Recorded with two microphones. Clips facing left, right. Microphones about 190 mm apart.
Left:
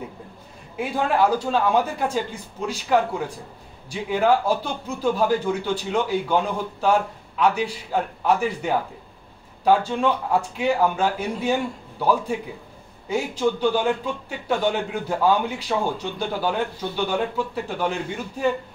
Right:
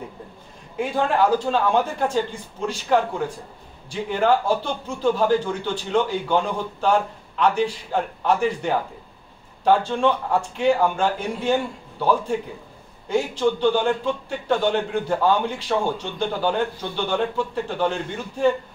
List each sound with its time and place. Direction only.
0.7 s a man's voice: 5° left (ahead or behind)